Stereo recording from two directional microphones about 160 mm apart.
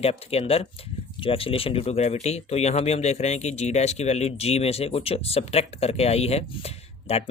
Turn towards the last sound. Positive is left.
turn(degrees=40)  # may be behind; listen again after turning